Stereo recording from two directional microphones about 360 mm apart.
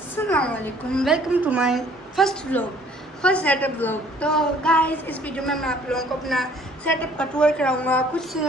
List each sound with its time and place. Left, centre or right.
0.1 s a woman's voice: centre